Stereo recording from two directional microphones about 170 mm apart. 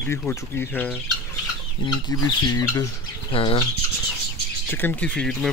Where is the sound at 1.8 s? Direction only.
25° left (ahead or behind).